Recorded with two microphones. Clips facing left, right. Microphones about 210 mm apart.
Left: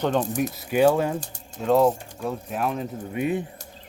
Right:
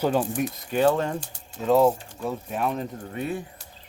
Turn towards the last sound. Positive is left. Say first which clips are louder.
# left 4 dB
turn(degrees=15)  # may be behind; listen again after turning